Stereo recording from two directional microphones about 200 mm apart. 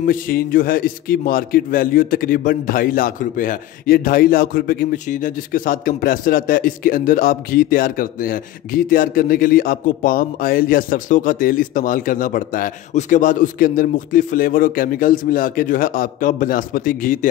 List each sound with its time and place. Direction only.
0.0 s a man's voice: 45° left (ahead or behind)